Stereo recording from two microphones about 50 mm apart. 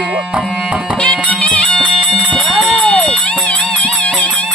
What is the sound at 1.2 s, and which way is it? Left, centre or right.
Music, left.